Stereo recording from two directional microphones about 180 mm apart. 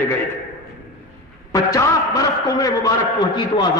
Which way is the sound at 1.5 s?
20° left (ahead or behind).